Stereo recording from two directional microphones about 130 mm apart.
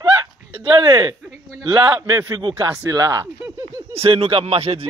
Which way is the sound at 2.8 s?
25° right (ahead or behind).